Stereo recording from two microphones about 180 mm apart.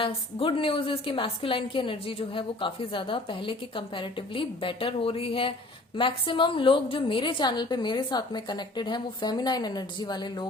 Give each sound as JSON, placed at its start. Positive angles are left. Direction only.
{"t": 0.0, "sound": "a woman's voice", "side_deg": 30}